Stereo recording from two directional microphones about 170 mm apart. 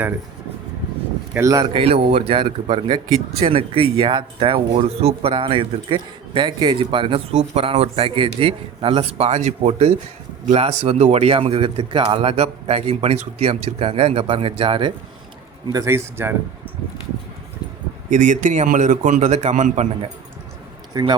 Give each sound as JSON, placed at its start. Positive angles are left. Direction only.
{"t": 1.3, "sound": "a man's voice", "side_deg": -15}
{"t": 1.7, "sound": "speech", "side_deg": -35}
{"t": 15.7, "sound": "a man's voice", "side_deg": -15}
{"t": 18.1, "sound": "a man's voice", "side_deg": -50}
{"t": 20.9, "sound": "speech", "side_deg": -25}